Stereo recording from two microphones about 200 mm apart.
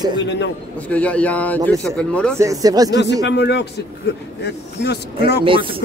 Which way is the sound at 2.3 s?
15° right (ahead or behind).